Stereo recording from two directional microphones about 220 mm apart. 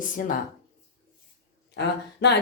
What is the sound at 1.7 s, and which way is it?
Speech, 50° left (ahead or behind).